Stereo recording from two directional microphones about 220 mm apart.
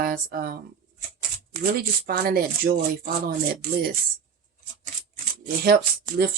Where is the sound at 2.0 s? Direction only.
45° right (ahead or behind).